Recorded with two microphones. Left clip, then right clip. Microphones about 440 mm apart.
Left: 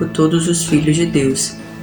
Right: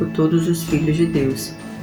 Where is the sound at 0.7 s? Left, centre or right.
Right.